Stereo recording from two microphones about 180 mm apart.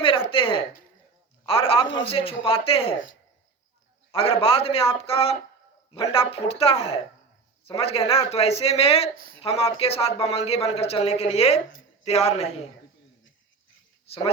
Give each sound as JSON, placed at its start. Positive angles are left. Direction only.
{"t": 0.3, "sound": "a sound", "side_deg": 30}
{"t": 1.5, "sound": "speech", "side_deg": 30}
{"t": 4.1, "sound": "speech", "side_deg": 30}